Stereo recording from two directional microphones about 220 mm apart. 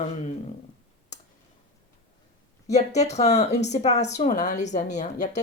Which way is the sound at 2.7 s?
30° left (ahead or behind).